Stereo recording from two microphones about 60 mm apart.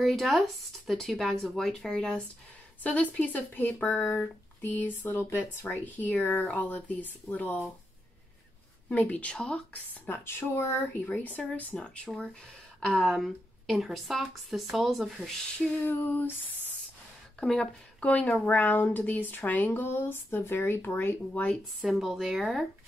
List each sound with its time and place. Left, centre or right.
0.0 s speech: centre
2.8 s speech: left
8.8 s a woman's voice: left
10.0 s speech: left
11.1 s a woman's voice: left
12.8 s speech: centre
15.8 s speech: left
17.4 s speech: centre
18.0 s speech: left
21.8 s speech: centre